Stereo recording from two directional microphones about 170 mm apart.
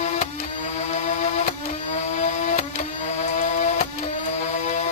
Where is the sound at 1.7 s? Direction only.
40° left (ahead or behind).